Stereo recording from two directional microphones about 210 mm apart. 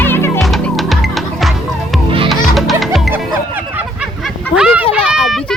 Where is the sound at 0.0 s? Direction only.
10° left (ahead or behind); by 4.3 s 5° right (ahead or behind).